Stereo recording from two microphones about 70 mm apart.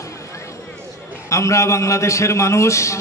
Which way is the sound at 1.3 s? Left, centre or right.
Left.